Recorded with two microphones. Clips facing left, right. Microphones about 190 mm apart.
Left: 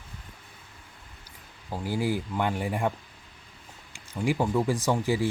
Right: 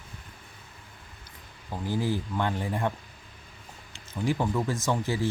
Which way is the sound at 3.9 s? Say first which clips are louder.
Left 1 dB; 10° left (ahead or behind).